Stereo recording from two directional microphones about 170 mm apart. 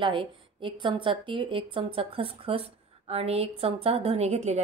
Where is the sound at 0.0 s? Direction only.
30° right (ahead or behind).